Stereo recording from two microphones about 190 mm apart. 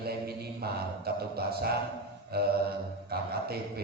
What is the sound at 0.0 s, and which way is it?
Mantra, 55° right (ahead or behind).